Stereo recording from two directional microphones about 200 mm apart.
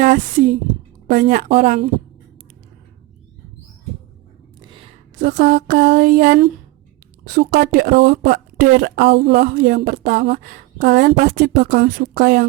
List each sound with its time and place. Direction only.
0.0 s speech: 40° right (ahead or behind)
4.6 s a sound: 25° right (ahead or behind)
5.2 s speech: 45° right (ahead or behind)